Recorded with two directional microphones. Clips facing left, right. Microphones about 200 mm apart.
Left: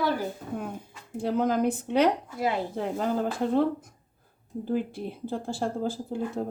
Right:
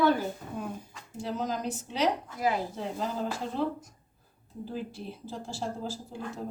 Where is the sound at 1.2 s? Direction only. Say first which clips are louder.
Left 8 dB; 55° left (ahead or behind).